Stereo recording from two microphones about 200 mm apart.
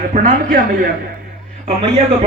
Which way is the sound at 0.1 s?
40° right (ahead or behind).